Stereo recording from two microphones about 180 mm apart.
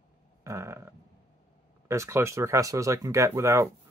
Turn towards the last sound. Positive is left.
turn(degrees=-15)  # may be behind; listen again after turning